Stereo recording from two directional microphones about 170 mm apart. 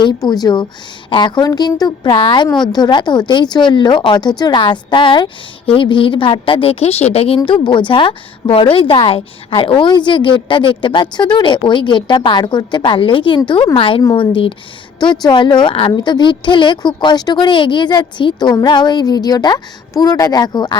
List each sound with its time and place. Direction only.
0.0 s a woman's voice: 25° left (ahead or behind)